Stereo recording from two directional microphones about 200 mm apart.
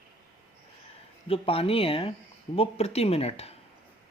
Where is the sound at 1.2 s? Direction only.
30° left (ahead or behind).